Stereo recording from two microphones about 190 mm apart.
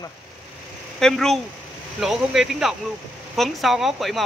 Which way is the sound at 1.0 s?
Centre (ahead or behind).